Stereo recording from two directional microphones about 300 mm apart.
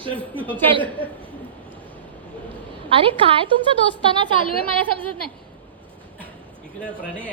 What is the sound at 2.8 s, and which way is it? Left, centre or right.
A woman's voice, centre.